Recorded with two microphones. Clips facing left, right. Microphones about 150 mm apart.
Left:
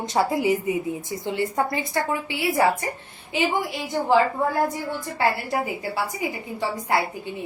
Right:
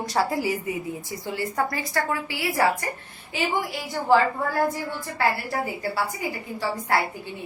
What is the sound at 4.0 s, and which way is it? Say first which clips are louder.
Speech: left 4 dB; 20° left (ahead or behind).